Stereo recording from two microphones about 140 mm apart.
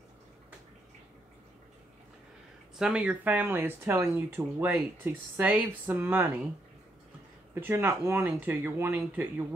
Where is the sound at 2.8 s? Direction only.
5° right (ahead or behind).